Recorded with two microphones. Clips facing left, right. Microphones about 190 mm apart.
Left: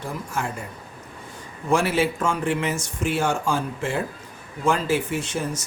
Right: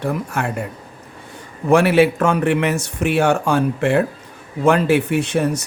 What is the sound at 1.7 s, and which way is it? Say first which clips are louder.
Speech: right 8 dB; 65° right (ahead or behind).